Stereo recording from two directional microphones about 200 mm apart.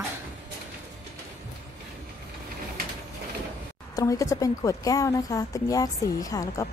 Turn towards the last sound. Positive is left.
turn(degrees=15)  # may be behind; listen again after turning